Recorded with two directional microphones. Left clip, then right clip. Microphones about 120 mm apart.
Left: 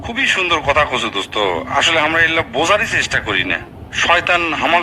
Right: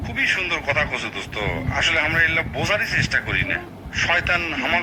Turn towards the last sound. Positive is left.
turn(degrees=40)  # may be behind; listen again after turning